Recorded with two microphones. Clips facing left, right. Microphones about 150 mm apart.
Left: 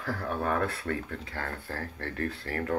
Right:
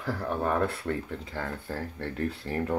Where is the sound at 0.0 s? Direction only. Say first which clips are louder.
Right 2 dB; 20° right (ahead or behind).